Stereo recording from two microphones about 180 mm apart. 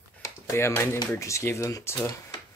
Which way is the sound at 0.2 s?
15° left (ahead or behind).